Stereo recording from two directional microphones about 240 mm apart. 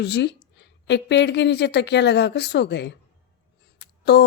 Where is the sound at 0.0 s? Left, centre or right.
Left.